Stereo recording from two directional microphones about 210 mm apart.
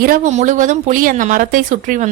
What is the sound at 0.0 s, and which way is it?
A woman's voice, 40° right (ahead or behind).